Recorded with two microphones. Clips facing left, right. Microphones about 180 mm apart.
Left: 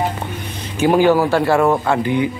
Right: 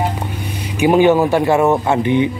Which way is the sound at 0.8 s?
20° right (ahead or behind).